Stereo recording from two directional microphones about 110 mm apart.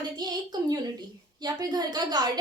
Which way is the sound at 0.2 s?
40° right (ahead or behind).